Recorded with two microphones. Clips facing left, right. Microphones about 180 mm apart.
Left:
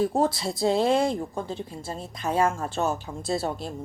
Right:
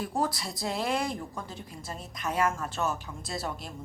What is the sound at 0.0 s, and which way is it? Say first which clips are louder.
Speech: left 7 dB; 25° left (ahead or behind).